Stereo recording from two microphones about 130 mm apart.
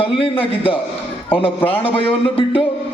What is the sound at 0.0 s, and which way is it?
A man's voice, 45° left (ahead or behind).